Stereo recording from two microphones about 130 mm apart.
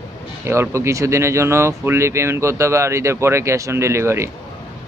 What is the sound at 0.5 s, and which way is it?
Speech, 20° right (ahead or behind).